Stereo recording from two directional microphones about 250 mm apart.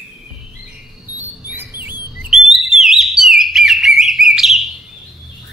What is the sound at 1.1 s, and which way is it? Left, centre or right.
Chirp, centre.